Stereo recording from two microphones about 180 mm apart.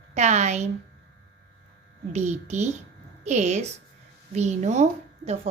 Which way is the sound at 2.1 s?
40° right (ahead or behind).